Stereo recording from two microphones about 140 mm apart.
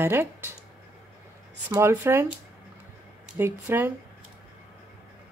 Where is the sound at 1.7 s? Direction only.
20° right (ahead or behind).